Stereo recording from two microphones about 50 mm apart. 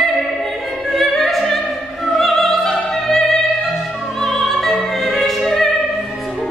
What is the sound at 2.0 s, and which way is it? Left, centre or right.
Music, centre.